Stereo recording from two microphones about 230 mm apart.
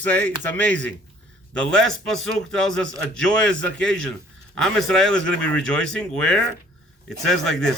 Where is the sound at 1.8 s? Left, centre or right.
Right.